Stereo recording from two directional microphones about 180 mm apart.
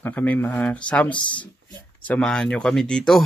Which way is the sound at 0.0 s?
10° left (ahead or behind).